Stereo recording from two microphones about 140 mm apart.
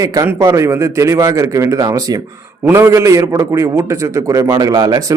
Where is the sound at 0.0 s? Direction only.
25° right (ahead or behind).